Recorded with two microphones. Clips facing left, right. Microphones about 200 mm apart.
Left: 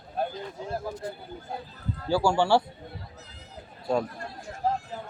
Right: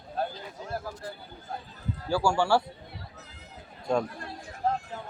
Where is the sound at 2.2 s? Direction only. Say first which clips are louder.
Left 2 dB; 20° left (ahead or behind).